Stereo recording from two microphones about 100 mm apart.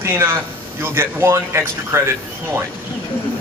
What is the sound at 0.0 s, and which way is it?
A man's voice, 25° right (ahead or behind).